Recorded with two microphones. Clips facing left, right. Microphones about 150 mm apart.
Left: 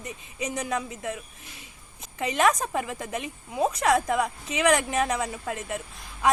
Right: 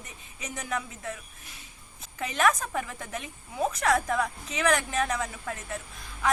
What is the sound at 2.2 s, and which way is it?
Speech, 20° left (ahead or behind).